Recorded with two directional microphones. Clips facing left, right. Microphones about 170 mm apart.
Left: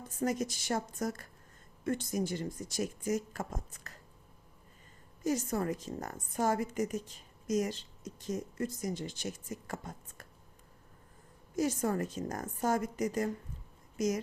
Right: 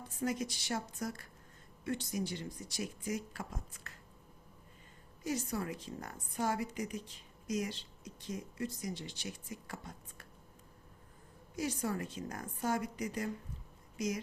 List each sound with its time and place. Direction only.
0.0 s a woman's voice: 45° left (ahead or behind)
5.2 s a woman's voice: 45° left (ahead or behind)
11.5 s a woman's voice: 45° left (ahead or behind)